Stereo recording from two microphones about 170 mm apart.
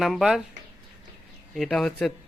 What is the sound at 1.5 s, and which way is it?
Speech, centre (ahead or behind).